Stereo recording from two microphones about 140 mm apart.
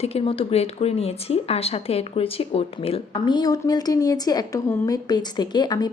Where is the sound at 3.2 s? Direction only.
30° left (ahead or behind).